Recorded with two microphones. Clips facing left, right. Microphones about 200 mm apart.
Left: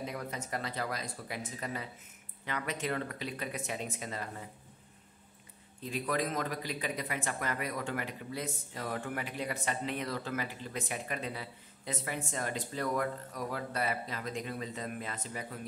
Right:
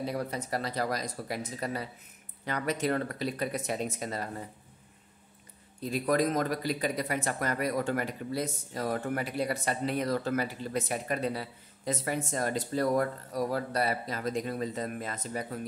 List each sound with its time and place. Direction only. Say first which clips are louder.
0.0 s speech: right 6 dB; 35° right (ahead or behind)
5.8 s speech: right 6 dB; 40° right (ahead or behind)